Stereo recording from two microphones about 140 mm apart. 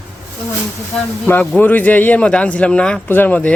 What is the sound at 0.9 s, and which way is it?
Speech, 15° left (ahead or behind).